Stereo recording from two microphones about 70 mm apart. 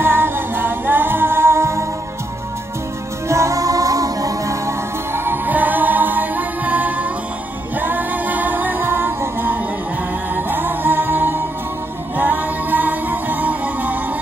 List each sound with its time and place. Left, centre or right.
0.0 s music: right
3.3 s music: right
5.1 s music: right